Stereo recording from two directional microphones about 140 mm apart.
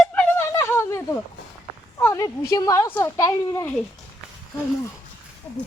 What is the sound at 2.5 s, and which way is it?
A woman's voice, 25° left (ahead or behind).